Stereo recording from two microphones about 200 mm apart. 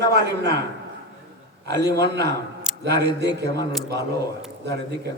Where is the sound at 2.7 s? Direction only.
5° right (ahead or behind).